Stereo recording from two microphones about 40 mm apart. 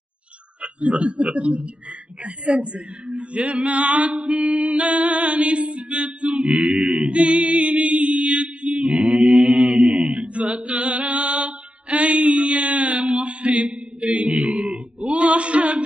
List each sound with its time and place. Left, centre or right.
0.6 s speech: right
7.1 s mantra: right